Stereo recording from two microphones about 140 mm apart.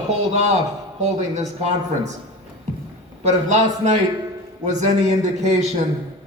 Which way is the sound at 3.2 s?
55° right (ahead or behind).